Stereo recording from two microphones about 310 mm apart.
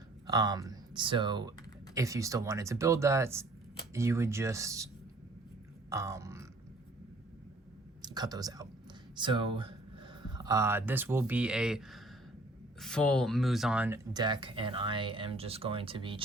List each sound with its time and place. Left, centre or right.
0.3 s speech: centre
5.9 s speech: centre
8.0 s speech: centre